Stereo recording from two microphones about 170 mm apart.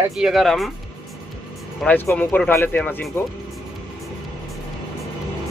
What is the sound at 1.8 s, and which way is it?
Speech, 10° left (ahead or behind).